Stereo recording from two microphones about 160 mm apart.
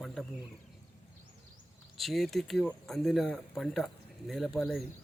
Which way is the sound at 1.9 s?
Centre (ahead or behind).